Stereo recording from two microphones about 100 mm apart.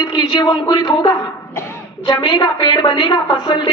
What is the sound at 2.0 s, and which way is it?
A man's voice, 50° left (ahead or behind).